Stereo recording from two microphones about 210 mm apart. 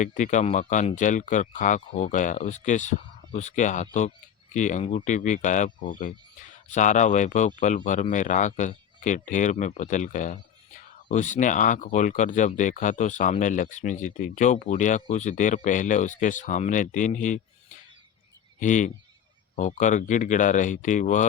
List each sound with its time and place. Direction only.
0.0 s speech: 35° left (ahead or behind)
18.6 s speech: 35° left (ahead or behind)